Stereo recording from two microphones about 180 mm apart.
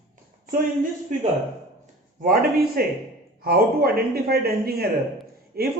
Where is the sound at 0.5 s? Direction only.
50° right (ahead or behind).